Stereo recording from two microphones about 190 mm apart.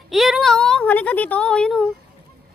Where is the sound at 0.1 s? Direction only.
Centre (ahead or behind).